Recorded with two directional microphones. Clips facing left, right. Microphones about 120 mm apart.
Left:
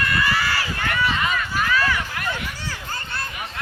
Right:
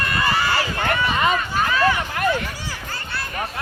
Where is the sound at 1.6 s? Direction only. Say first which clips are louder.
Right 3 dB; 20° right (ahead or behind).